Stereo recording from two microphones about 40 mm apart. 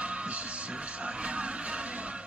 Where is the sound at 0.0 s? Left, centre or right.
Right.